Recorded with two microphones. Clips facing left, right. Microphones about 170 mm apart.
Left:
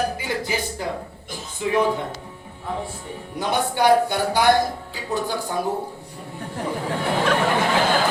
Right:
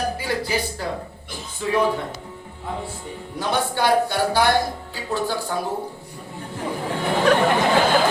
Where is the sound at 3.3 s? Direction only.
15° left (ahead or behind).